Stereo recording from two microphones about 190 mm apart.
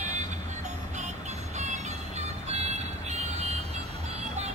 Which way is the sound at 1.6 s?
35° right (ahead or behind).